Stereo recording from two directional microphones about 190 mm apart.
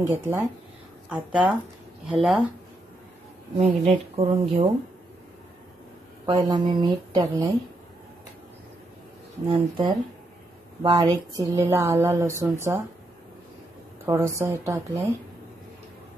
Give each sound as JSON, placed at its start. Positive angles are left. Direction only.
{"t": 0.0, "sound": "speech", "side_deg": -10}
{"t": 3.5, "sound": "a woman's voice", "side_deg": -35}
{"t": 6.2, "sound": "a woman's voice", "side_deg": -25}
{"t": 9.5, "sound": "a woman's voice", "side_deg": -25}
{"t": 14.0, "sound": "speech", "side_deg": -15}